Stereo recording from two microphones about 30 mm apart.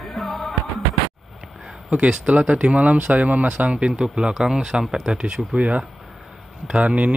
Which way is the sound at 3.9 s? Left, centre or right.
Right.